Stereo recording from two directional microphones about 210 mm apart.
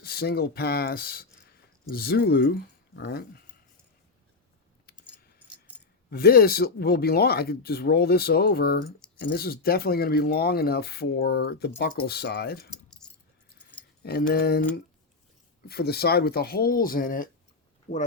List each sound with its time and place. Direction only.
0.0 s speech: 50° left (ahead or behind)
6.1 s speech: 50° left (ahead or behind)
13.0 s keys jangling: 5° left (ahead or behind)
14.0 s speech: 50° left (ahead or behind)